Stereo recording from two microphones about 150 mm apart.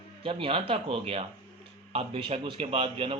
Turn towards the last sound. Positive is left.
turn(degrees=-35)  # may be behind; listen again after turning